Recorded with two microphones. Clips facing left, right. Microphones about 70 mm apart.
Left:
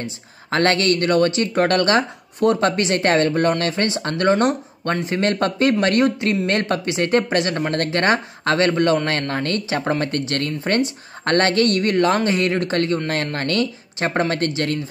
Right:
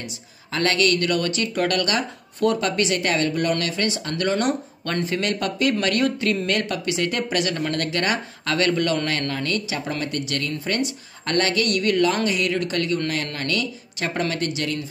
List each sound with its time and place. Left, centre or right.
0.5 s speech: left